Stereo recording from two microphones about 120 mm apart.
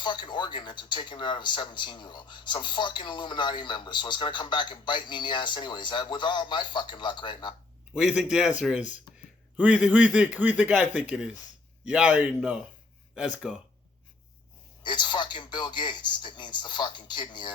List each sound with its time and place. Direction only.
0.0 s speech: 40° left (ahead or behind)
7.9 s speech: 5° right (ahead or behind)
9.1 s a sound: 40° left (ahead or behind)
9.6 s speech: 10° right (ahead or behind)
14.8 s speech: 40° left (ahead or behind)